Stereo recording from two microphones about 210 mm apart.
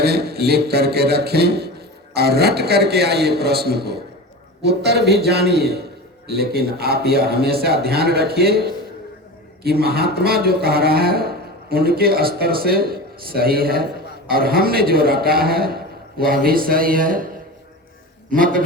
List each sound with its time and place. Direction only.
0.0 s speech: 50° right (ahead or behind)
18.3 s a man's voice: 40° right (ahead or behind)